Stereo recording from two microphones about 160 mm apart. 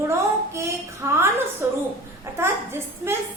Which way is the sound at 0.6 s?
15° right (ahead or behind).